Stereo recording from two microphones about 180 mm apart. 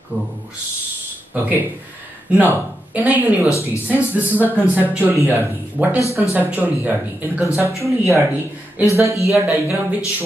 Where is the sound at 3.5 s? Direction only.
15° left (ahead or behind).